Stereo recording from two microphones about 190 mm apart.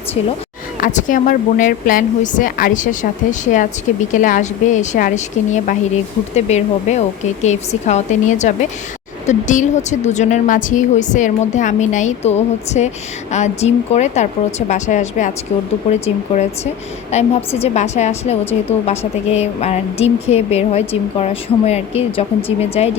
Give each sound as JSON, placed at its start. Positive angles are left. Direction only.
{"t": 0.8, "sound": "a woman's voice", "side_deg": 45}